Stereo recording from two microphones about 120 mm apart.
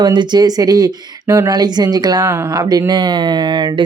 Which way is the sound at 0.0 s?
40° right (ahead or behind).